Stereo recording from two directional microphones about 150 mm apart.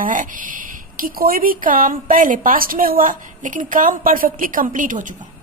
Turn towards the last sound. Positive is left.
turn(degrees=-60)  # may be behind; listen again after turning